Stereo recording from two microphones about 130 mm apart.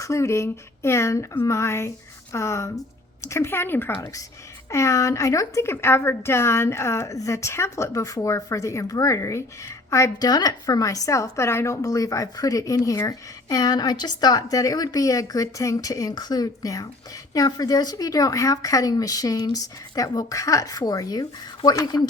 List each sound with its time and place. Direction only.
0.0 s speech: 20° left (ahead or behind)